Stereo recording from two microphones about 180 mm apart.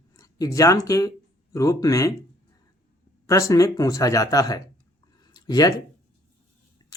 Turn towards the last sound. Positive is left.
turn(degrees=20)  # may be behind; listen again after turning